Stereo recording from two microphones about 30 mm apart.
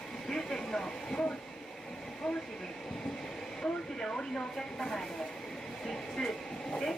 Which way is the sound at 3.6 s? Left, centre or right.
Left.